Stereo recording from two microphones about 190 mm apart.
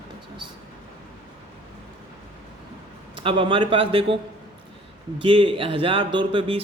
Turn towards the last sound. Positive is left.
turn(degrees=-25)  # may be behind; listen again after turning